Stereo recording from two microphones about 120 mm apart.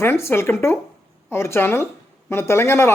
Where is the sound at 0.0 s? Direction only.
20° left (ahead or behind).